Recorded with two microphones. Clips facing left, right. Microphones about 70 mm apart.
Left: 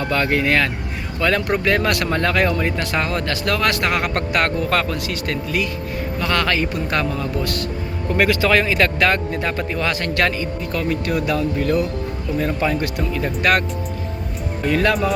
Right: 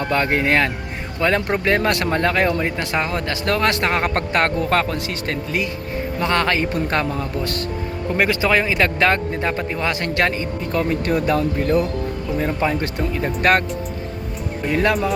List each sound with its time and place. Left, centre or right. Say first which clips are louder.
0.0 s speech: even; right
14.7 s speech: left 1 dB; centre